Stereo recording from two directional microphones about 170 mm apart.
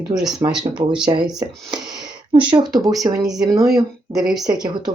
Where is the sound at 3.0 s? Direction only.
25° right (ahead or behind).